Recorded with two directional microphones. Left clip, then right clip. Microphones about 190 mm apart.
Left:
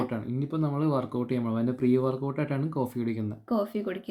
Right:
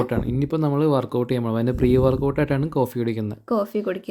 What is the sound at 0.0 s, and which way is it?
A woman's voice, 50° right (ahead or behind).